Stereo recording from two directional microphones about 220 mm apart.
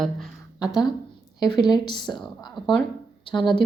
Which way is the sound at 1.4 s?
20° left (ahead or behind).